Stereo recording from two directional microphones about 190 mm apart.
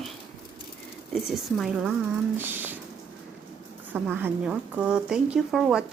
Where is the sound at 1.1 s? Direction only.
Centre (ahead or behind).